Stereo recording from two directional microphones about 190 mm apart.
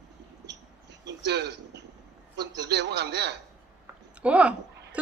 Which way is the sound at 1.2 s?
65° right (ahead or behind).